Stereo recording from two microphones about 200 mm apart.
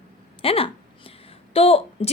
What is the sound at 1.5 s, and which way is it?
Speech, 30° left (ahead or behind).